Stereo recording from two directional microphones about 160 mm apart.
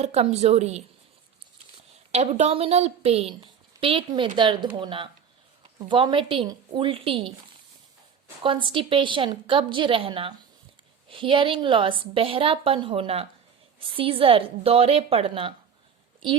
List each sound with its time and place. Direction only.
0.0 s a woman's voice: 40° right (ahead or behind)
2.1 s a woman's voice: 40° right (ahead or behind)
8.4 s a woman's voice: 30° right (ahead or behind)